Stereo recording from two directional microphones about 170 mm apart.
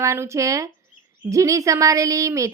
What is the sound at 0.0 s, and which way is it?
A woman's voice, 15° right (ahead or behind).